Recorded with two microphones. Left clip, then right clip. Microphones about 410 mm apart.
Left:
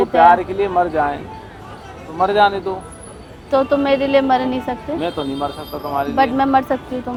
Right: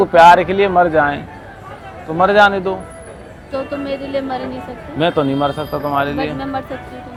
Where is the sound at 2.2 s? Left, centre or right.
Right.